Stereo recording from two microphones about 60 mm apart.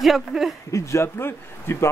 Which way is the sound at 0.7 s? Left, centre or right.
Left.